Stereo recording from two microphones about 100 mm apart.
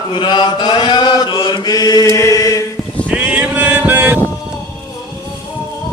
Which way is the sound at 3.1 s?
15° right (ahead or behind).